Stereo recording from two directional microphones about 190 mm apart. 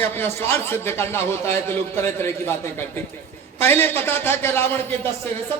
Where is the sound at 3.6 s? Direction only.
10° left (ahead or behind).